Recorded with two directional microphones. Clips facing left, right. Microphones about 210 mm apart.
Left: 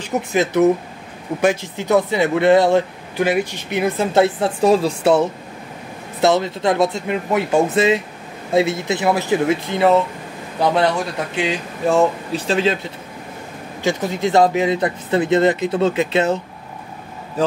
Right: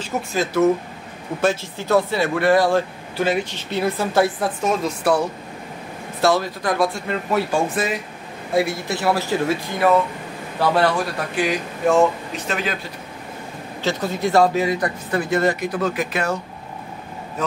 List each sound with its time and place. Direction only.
0.0 s speech: 20° left (ahead or behind)
13.8 s speech: 15° left (ahead or behind)
17.4 s speech: 30° left (ahead or behind)